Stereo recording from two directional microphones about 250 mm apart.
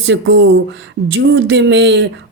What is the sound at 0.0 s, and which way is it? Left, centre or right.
Speech, right.